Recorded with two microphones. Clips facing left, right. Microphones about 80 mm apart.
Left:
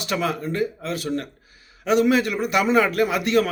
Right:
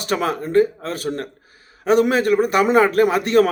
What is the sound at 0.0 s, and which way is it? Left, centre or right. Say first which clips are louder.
A man's voice: right 3 dB; right.